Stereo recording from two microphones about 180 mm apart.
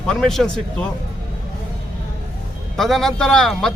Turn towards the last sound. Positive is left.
turn(degrees=0)  # may be behind; listen again after turning